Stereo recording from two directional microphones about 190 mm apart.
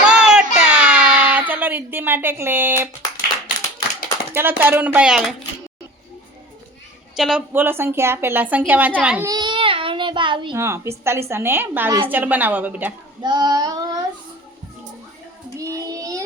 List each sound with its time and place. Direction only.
0.0 s a sound: 5° right (ahead or behind)
4.4 s a woman's voice: 10° right (ahead or behind)
7.2 s a woman's voice: 5° right (ahead or behind)
9.3 s a sound: 25° right (ahead or behind)
10.6 s a woman's voice: 15° right (ahead or behind)
13.2 s child singing: 20° right (ahead or behind)
15.5 s child singing: 15° right (ahead or behind)